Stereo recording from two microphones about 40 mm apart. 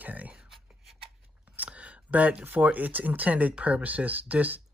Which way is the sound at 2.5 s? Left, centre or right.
Right.